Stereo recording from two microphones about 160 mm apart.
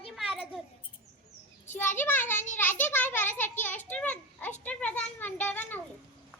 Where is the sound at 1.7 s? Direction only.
15° left (ahead or behind).